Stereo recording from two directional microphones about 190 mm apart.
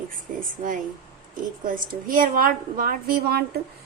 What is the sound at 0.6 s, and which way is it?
A woman's voice, 40° right (ahead or behind).